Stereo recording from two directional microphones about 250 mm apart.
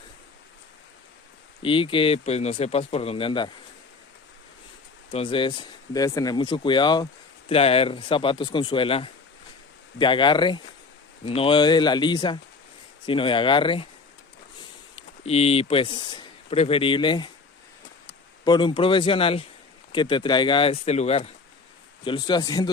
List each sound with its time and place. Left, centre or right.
1.6 s speech: left
5.1 s speech: left
14.9 s speech: left
18.4 s speech: centre